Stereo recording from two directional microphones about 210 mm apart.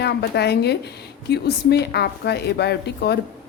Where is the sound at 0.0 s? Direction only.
50° left (ahead or behind).